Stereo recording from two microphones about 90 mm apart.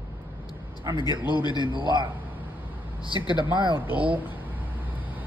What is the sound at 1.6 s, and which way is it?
Speech, 60° right (ahead or behind).